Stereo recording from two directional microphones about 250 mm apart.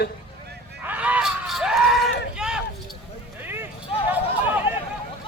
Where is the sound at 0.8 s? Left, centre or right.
Centre.